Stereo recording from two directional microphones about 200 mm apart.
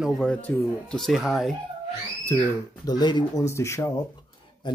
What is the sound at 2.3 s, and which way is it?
Speech, 10° left (ahead or behind).